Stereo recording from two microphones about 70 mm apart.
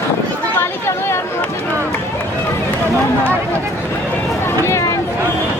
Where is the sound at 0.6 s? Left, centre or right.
Left.